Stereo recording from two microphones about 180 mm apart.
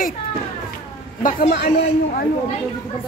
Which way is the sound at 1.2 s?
50° left (ahead or behind).